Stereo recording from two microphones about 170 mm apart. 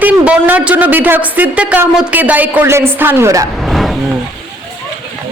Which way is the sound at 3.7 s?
Centre (ahead or behind).